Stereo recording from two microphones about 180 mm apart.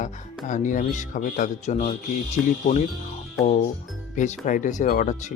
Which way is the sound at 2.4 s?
Centre (ahead or behind).